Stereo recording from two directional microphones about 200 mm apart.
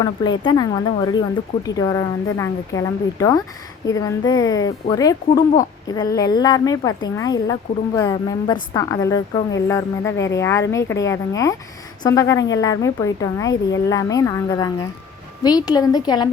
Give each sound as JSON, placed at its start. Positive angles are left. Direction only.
{"t": 0.0, "sound": "a woman's voice", "side_deg": 20}